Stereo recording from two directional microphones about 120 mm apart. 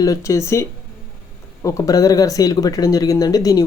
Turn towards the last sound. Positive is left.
turn(degrees=30)  # may be behind; listen again after turning